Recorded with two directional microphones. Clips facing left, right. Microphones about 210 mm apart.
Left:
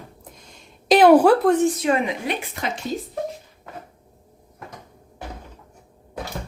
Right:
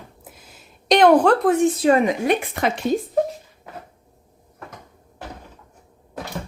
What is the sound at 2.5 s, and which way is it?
Speech, 60° right (ahead or behind).